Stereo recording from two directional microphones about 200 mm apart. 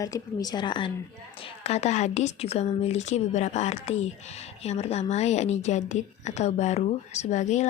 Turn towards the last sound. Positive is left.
turn(degrees=35)  # may be behind; listen again after turning